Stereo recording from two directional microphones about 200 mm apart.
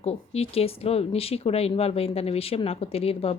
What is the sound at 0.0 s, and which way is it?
Speech, 30° left (ahead or behind).